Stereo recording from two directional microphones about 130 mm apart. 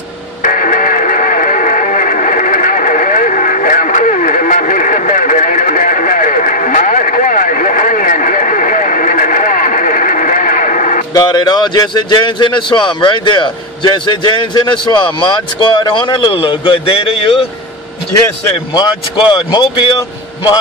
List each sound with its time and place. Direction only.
0.4 s music: 85° left
11.1 s a man's voice: 30° left (ahead or behind)
18.7 s a man's voice: 35° left (ahead or behind)